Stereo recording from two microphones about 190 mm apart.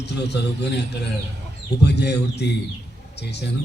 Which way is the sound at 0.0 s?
65° left (ahead or behind).